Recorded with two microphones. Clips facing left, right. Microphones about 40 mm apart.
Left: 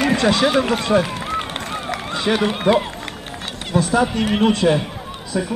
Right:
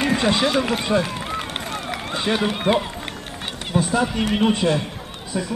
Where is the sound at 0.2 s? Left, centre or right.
Centre.